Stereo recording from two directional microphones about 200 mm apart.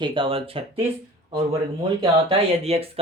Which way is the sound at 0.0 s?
25° right (ahead or behind).